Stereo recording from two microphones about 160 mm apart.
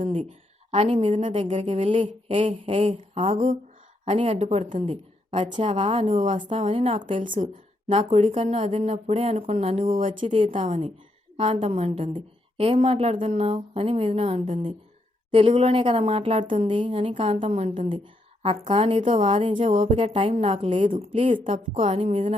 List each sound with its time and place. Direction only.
0.7 s a woman's voice: 35° right (ahead or behind)
6.5 s a woman's voice: 45° right (ahead or behind)
10.5 s a woman's voice: 50° right (ahead or behind)
17.4 s a woman's voice: 45° right (ahead or behind)